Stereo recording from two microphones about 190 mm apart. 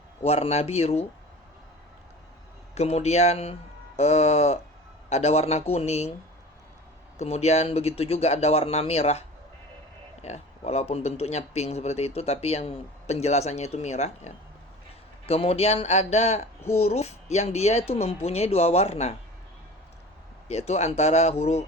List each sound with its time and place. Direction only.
0.2 s speech: 35° left (ahead or behind)
2.7 s speech: 35° left (ahead or behind)
7.2 s speech: 35° left (ahead or behind)
20.5 s speech: 35° left (ahead or behind)